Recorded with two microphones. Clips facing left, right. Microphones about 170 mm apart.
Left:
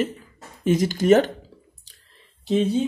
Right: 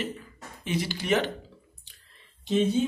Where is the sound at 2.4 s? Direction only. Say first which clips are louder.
Left 3 dB; 35° left (ahead or behind).